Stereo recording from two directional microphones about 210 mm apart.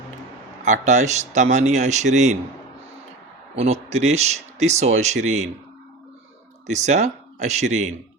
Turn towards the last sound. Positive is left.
turn(degrees=-35)  # may be behind; listen again after turning